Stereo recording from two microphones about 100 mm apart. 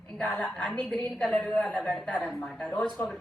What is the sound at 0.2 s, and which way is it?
A woman's voice, 10° left (ahead or behind).